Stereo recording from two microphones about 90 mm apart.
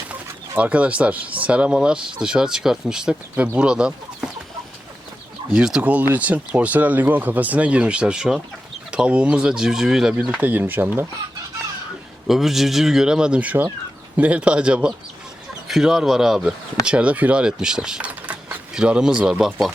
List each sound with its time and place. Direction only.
0.1 s speech: 15° right (ahead or behind)
5.5 s speech: 10° right (ahead or behind)
12.3 s speech: 5° right (ahead or behind)